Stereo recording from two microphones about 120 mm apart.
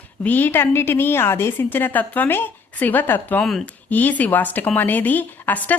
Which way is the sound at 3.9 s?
15° left (ahead or behind).